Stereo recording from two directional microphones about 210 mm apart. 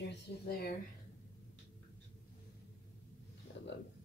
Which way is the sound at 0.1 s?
45° left (ahead or behind).